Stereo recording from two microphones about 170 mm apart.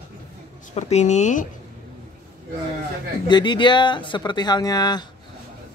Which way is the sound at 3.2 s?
25° left (ahead or behind).